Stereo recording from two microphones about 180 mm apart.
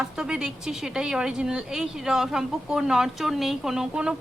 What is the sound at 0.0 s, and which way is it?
Speech, 5° right (ahead or behind).